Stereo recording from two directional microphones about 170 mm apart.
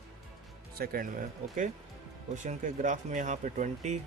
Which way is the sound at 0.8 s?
55° right (ahead or behind).